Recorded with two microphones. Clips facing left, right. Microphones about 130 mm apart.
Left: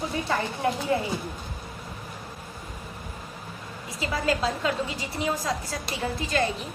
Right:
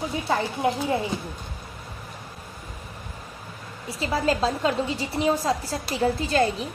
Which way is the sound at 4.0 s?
30° right (ahead or behind).